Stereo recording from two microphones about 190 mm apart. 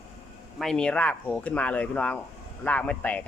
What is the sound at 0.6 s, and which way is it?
Speech, 5° left (ahead or behind).